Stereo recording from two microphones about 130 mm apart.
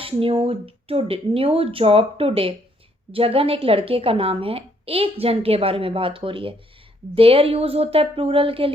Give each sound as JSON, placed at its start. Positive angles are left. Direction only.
{"t": 0.0, "sound": "a woman's voice", "side_deg": -45}